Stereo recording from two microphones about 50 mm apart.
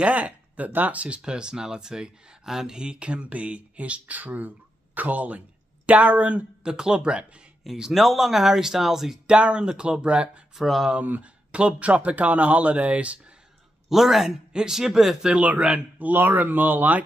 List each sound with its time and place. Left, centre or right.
0.0 s speech: right
6.6 s speech: centre
9.3 s speech: right
10.5 s speech: centre
11.1 s speech: right
13.8 s speech: centre
15.3 s speech: right